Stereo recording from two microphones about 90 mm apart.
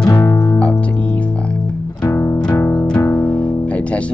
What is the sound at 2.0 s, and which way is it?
Music, 35° left (ahead or behind).